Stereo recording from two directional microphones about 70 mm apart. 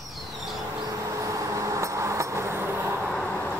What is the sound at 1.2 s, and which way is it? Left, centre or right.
Vehicle, right.